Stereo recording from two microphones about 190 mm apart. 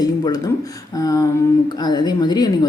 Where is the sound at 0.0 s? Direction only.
20° left (ahead or behind).